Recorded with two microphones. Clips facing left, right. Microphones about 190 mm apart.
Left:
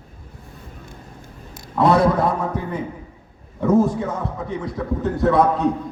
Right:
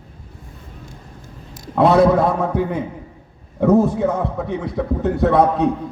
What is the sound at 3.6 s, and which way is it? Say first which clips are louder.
A man's voice: right 3 dB; 65° right (ahead or behind).